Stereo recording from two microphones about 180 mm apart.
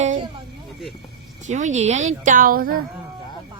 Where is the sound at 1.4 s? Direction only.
40° right (ahead or behind).